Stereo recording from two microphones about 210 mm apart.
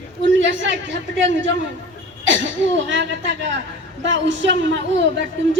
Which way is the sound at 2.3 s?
60° right (ahead or behind).